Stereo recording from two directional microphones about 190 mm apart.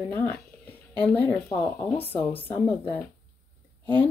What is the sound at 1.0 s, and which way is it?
Speech, 10° left (ahead or behind).